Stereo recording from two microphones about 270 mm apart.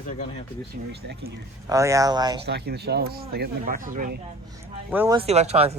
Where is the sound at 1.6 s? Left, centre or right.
Centre.